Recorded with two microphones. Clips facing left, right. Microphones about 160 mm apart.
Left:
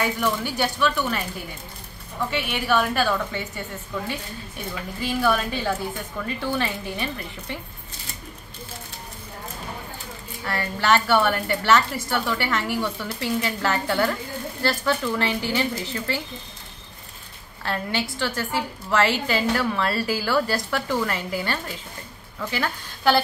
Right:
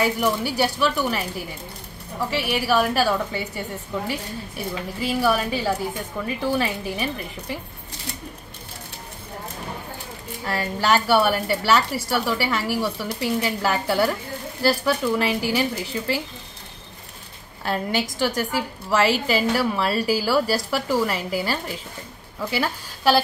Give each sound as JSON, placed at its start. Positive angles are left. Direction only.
{"t": 0.0, "sound": "a woman's voice", "side_deg": -10}
{"t": 10.4, "sound": "a woman's voice", "side_deg": -10}
{"t": 17.6, "sound": "a woman's voice", "side_deg": -15}